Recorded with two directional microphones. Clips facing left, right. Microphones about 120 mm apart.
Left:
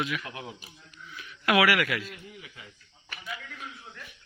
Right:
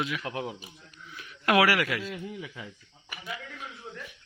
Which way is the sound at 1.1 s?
35° right (ahead or behind).